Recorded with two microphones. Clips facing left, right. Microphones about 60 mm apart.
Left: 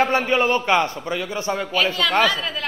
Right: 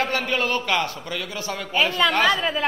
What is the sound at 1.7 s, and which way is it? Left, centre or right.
Speech, right.